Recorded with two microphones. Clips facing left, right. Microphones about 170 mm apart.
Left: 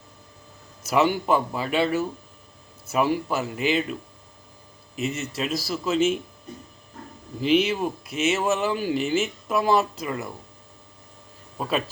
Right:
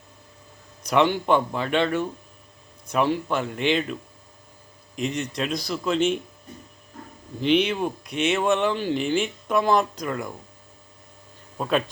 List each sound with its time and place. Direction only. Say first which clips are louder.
0.8 s speech: right 1 dB; 5° left (ahead or behind)
4.9 s speech: right 1 dB; 5° left (ahead or behind)
7.4 s speech: even; 5° left (ahead or behind)
11.5 s speech: right 3 dB; centre (ahead or behind)